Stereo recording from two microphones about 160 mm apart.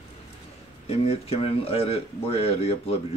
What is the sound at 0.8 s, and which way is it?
Speech, 40° left (ahead or behind).